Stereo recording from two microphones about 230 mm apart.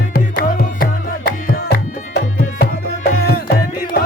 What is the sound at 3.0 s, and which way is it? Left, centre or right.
Music, left.